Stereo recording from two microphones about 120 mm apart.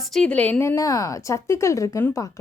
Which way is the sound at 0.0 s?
5° left (ahead or behind).